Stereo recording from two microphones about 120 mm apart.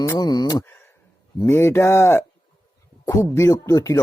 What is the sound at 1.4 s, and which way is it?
Speech, 20° left (ahead or behind).